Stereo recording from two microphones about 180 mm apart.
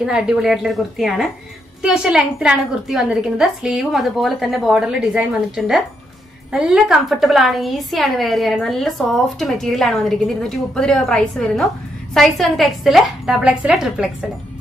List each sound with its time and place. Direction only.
0.0 s a woman's voice: 5° right (ahead or behind)